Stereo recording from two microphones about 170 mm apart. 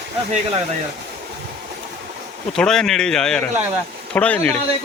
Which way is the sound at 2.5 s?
5° left (ahead or behind).